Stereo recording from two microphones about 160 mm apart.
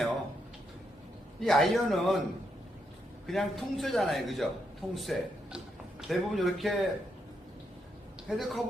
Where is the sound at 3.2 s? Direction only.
Centre (ahead or behind).